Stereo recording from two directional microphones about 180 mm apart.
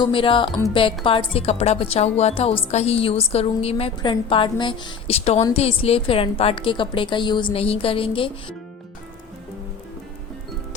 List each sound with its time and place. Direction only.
0.0 s a woman's voice: 30° left (ahead or behind)